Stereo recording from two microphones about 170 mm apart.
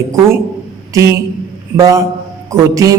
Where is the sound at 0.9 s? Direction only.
20° right (ahead or behind).